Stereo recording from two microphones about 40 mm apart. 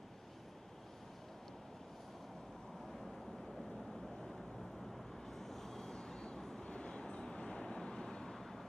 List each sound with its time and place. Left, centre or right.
4.9 s vehicle: centre